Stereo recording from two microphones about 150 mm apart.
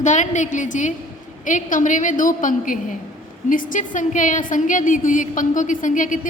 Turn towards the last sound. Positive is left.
turn(degrees=60)  # may be behind; listen again after turning